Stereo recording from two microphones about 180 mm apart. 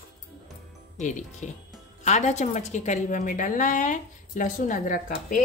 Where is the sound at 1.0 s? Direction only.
45° left (ahead or behind).